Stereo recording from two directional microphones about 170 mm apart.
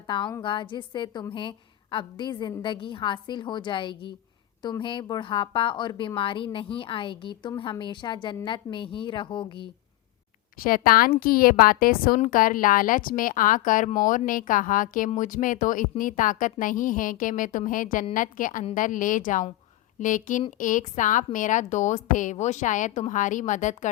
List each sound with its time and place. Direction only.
0.1 s a woman's voice: 30° left (ahead or behind)
10.6 s a woman's voice: 55° left (ahead or behind)